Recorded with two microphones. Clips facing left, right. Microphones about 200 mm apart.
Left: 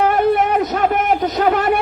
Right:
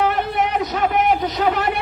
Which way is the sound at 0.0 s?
50° left (ahead or behind).